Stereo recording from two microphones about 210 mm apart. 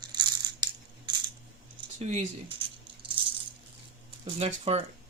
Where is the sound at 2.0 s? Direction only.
30° right (ahead or behind).